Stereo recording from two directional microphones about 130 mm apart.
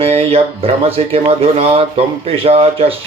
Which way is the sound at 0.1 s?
50° right (ahead or behind).